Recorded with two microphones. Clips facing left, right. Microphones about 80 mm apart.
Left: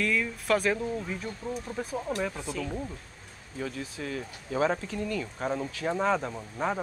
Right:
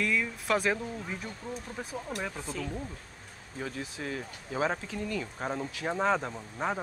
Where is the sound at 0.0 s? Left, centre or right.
Centre.